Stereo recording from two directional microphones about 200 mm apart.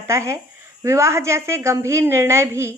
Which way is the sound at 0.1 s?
15° right (ahead or behind).